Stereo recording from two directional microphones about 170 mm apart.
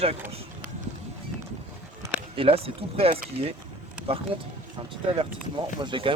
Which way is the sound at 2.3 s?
35° right (ahead or behind).